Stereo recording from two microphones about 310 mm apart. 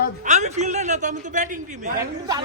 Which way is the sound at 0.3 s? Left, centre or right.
Right.